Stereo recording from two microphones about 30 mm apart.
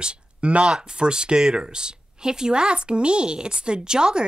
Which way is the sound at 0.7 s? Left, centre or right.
Right.